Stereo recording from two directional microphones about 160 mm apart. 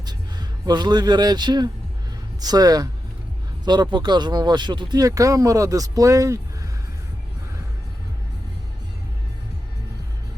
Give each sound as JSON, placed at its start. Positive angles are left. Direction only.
{"t": 0.0, "sound": "speech", "side_deg": -25}